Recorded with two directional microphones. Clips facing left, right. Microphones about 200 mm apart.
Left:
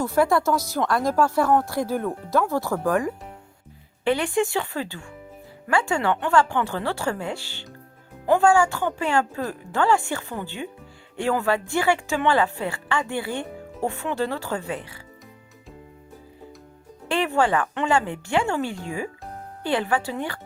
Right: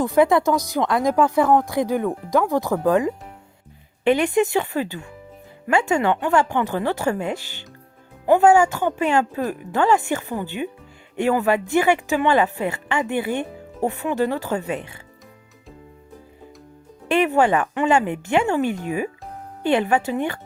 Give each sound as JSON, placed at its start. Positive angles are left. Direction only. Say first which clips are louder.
{"t": 0.0, "sound": "a woman's voice", "louder": "right 4 dB", "side_deg": -20}
{"t": 17.1, "sound": "a woman's voice", "louder": "right 4 dB", "side_deg": -20}